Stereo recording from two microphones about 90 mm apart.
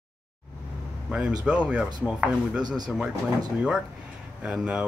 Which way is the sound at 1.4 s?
15° right (ahead or behind).